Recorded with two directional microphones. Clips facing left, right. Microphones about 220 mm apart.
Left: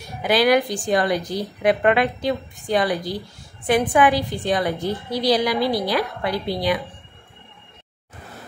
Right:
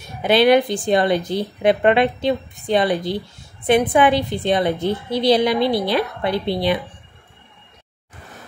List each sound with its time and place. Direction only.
0.2 s a woman's voice: 25° right (ahead or behind)